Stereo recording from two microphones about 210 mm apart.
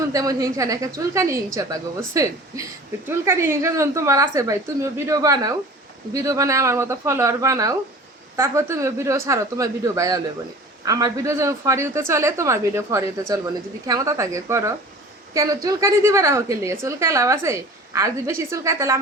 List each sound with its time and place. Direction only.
0.1 s a woman's voice: 15° right (ahead or behind)